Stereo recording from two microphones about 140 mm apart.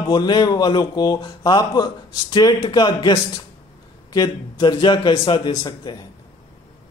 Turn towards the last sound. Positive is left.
turn(degrees=30)  # may be behind; listen again after turning